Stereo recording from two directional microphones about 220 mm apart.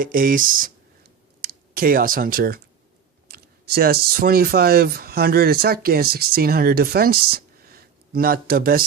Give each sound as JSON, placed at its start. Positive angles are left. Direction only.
{"t": 0.0, "sound": "speech", "side_deg": -40}